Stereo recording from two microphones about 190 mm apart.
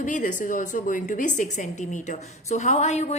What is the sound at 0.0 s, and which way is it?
A woman's voice, 40° left (ahead or behind).